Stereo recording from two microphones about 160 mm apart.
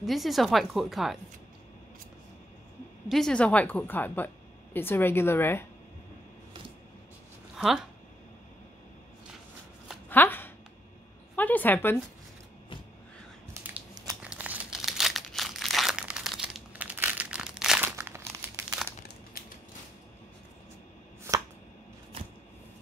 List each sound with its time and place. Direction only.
0.0 s speech: centre (ahead or behind)
3.1 s speech: 5° left (ahead or behind)
7.5 s speech: centre (ahead or behind)
10.0 s a sound: 10° left (ahead or behind)
11.3 s speech: 10° left (ahead or behind)
14.2 s crumpling: 10° right (ahead or behind)
17.8 s crumpling: 15° right (ahead or behind)
19.4 s mechanisms: 65° left (ahead or behind)